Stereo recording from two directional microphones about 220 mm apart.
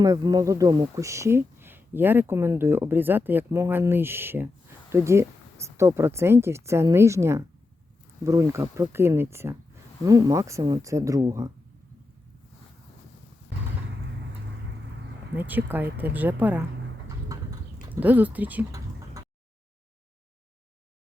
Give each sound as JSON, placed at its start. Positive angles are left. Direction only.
{"t": 0.0, "sound": "speech", "side_deg": -15}
{"t": 15.4, "sound": "speech", "side_deg": -10}
{"t": 17.3, "sound": "clip-clop", "side_deg": -15}
{"t": 18.0, "sound": "speech", "side_deg": -5}